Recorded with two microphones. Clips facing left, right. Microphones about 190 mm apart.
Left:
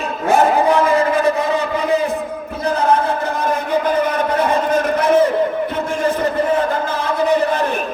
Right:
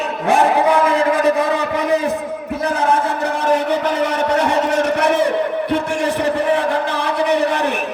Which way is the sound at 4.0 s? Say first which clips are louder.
Even; 75° right (ahead or behind).